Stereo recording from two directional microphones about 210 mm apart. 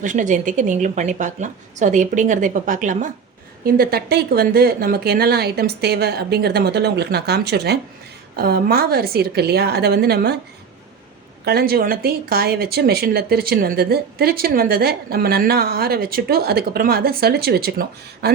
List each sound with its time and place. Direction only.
0.0 s speech: 35° right (ahead or behind)
11.4 s speech: 45° right (ahead or behind)